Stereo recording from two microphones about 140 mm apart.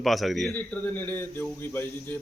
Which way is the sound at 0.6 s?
15° left (ahead or behind).